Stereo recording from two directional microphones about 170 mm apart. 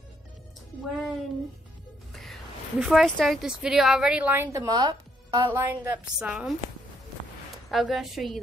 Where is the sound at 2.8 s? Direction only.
Centre (ahead or behind); by 5.5 s 25° right (ahead or behind).